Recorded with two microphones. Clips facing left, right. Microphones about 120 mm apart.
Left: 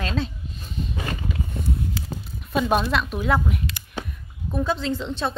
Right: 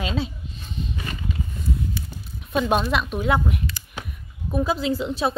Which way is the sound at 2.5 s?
Centre (ahead or behind).